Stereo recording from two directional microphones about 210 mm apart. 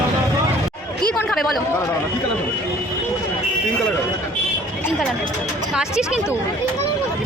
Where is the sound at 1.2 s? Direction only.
Centre (ahead or behind).